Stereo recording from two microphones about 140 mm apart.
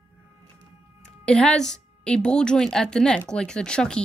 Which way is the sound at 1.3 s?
5° left (ahead or behind).